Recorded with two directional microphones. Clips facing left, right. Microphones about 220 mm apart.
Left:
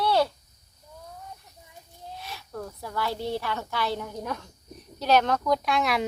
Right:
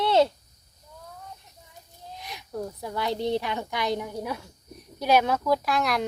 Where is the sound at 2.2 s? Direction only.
15° right (ahead or behind).